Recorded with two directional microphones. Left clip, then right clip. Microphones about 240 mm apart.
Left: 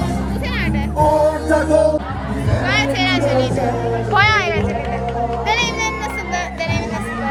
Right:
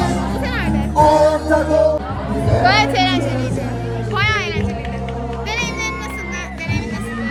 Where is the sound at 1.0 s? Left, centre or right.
Right.